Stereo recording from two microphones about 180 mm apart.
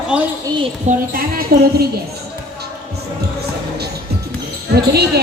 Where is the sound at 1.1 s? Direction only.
55° right (ahead or behind).